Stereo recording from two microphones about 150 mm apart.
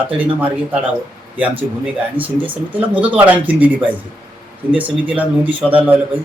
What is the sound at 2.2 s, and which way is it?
A man's voice, 10° right (ahead or behind).